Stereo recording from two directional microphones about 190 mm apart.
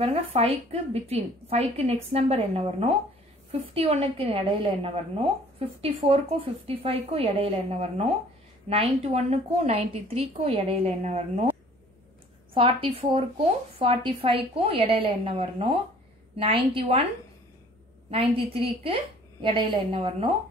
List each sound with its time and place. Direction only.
0.0 s a woman's voice: 30° right (ahead or behind)
12.5 s a woman's voice: 25° right (ahead or behind)
18.1 s a woman's voice: 30° right (ahead or behind)